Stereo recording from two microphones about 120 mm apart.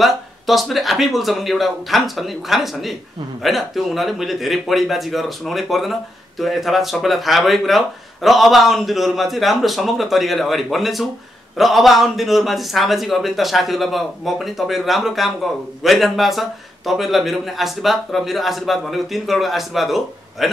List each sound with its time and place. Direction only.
0.0 s speech: centre (ahead or behind)